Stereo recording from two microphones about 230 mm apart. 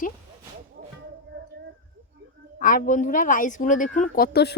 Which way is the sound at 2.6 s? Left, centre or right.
Left.